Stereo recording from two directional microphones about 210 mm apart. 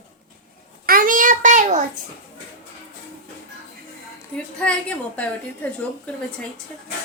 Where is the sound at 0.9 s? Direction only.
40° right (ahead or behind).